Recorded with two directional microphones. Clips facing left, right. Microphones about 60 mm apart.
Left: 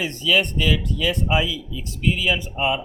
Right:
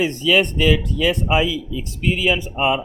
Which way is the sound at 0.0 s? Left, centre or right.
Right.